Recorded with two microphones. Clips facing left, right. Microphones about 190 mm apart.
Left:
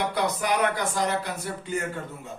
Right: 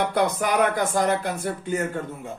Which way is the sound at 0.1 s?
50° right (ahead or behind).